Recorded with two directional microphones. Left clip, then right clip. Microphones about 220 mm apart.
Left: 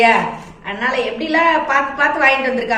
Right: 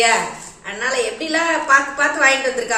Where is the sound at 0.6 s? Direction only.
20° right (ahead or behind).